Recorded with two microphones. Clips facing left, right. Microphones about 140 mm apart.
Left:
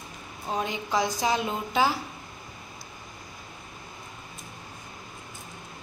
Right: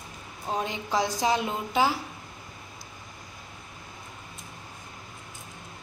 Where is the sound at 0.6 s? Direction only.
25° right (ahead or behind).